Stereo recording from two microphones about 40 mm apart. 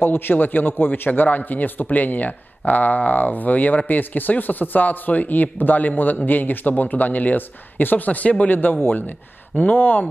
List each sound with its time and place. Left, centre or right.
0.0 s a man's voice: left
8.5 s a man's voice: left